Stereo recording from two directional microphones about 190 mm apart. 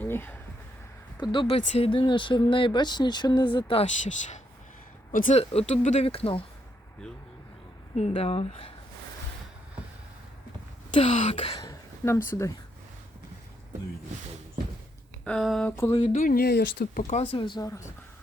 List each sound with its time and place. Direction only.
0.0 s a sound: 10° left (ahead or behind)
1.2 s speech: 25° left (ahead or behind); by 5.4 s 45° left (ahead or behind)
5.4 s speech: 35° left (ahead or behind)
7.9 s speech: 35° left (ahead or behind)
10.9 s speech: 30° left (ahead or behind)
11.6 s a sound: 15° left (ahead or behind)
15.2 s speech: 5° left (ahead or behind)
15.7 s a sound: 15° left (ahead or behind)
16.1 s speech: 45° left (ahead or behind)
17.0 s speech: 35° left (ahead or behind)
17.3 s speech: 25° left (ahead or behind)